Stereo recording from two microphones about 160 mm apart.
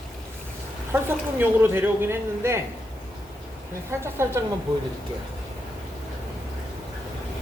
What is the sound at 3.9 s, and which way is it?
Speech, 15° right (ahead or behind).